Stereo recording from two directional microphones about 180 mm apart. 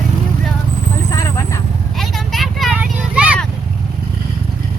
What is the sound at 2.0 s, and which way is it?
Vehicle, centre (ahead or behind).